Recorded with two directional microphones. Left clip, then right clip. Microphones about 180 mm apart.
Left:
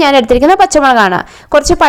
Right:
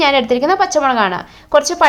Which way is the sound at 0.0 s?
30° left (ahead or behind).